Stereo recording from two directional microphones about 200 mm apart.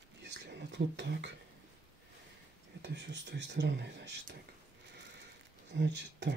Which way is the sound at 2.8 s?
60° right (ahead or behind).